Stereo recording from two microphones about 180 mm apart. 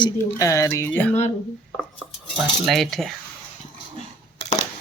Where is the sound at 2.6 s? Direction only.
Centre (ahead or behind).